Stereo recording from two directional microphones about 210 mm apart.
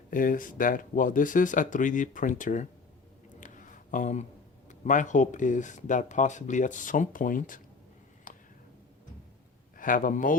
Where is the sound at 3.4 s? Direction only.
40° left (ahead or behind).